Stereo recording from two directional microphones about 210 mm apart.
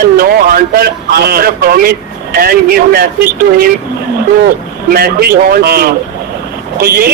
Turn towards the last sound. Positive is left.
turn(degrees=-45)  # may be behind; listen again after turning